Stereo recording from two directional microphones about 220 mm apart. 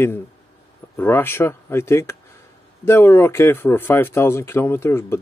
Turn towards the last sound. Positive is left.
turn(degrees=10)  # may be behind; listen again after turning